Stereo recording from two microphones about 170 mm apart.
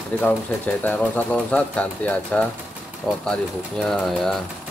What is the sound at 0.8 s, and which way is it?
Speech, 10° left (ahead or behind).